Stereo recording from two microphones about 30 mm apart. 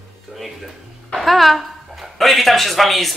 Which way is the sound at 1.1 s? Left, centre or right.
Centre.